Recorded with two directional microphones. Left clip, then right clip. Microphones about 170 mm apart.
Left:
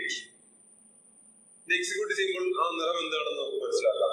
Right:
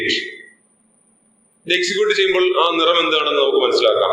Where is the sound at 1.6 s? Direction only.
20° right (ahead or behind).